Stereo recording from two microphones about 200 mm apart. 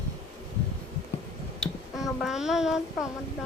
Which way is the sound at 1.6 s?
Centre (ahead or behind).